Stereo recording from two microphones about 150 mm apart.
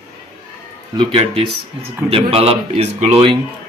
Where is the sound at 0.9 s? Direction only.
35° right (ahead or behind).